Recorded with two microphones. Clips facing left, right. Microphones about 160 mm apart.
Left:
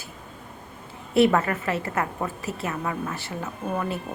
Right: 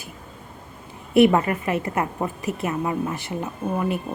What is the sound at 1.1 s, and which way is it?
A woman's voice, 15° right (ahead or behind).